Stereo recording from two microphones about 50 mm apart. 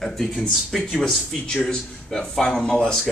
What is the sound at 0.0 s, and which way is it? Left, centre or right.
Speech, centre.